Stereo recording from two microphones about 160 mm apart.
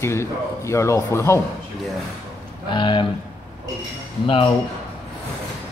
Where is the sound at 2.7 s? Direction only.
30° left (ahead or behind).